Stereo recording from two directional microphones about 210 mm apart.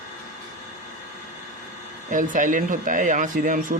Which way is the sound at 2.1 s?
40° right (ahead or behind).